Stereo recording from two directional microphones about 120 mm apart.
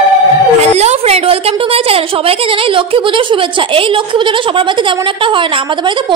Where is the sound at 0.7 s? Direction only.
60° right (ahead or behind); by 5.4 s 45° right (ahead or behind).